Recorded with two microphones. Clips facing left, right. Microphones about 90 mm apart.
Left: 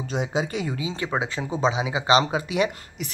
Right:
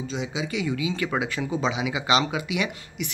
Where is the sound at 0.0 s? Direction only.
55° left (ahead or behind).